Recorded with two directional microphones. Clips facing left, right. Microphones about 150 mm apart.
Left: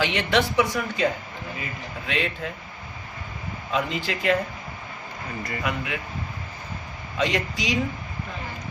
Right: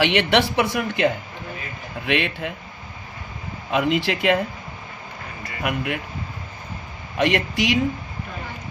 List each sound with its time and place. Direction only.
0.0 s a woman's voice: 75° right (ahead or behind)
2.0 s a woman's voice: 75° right (ahead or behind)
3.7 s a woman's voice: 70° right (ahead or behind)
5.6 s speech: 60° right (ahead or behind)
7.2 s a woman's voice: 65° right (ahead or behind)